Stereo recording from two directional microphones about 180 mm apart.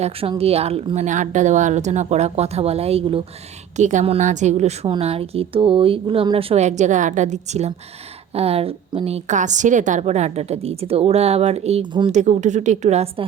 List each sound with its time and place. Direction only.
0.0 s a woman's voice: 30° right (ahead or behind)
12.1 s a woman's voice: 40° right (ahead or behind)